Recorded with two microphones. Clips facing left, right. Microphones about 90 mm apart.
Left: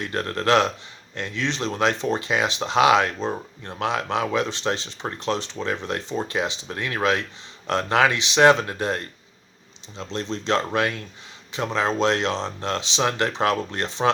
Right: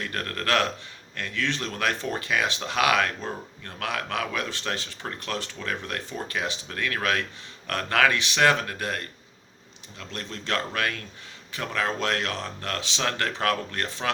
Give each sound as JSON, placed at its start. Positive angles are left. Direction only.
{"t": 0.0, "sound": "speech", "side_deg": 25}